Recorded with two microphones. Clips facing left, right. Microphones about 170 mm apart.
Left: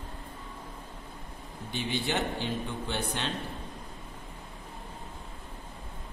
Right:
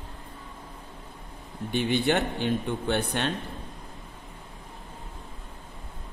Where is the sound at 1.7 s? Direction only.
60° right (ahead or behind).